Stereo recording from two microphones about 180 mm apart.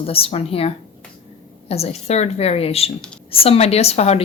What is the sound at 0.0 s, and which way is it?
A woman's voice, 30° left (ahead or behind).